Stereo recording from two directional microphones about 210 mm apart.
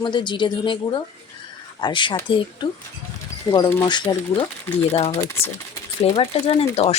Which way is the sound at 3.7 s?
15° left (ahead or behind).